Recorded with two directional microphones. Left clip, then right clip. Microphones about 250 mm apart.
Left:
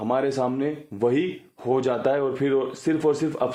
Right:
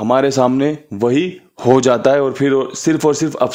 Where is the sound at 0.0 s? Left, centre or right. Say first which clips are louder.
Right 10 dB; right.